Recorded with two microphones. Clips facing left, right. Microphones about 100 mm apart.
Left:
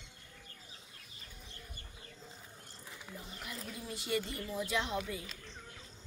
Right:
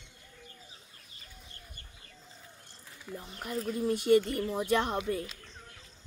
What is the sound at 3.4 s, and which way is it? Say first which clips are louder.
Speech: right 14 dB; 45° right (ahead or behind).